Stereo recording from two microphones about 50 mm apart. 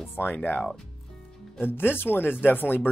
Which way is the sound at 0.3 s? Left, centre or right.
Left.